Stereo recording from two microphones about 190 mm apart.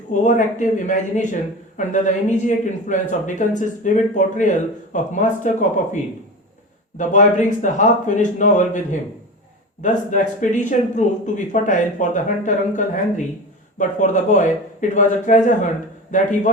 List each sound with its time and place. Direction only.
0.1 s speech: 40° left (ahead or behind)